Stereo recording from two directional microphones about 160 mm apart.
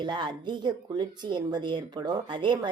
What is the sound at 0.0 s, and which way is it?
Speech, 25° right (ahead or behind).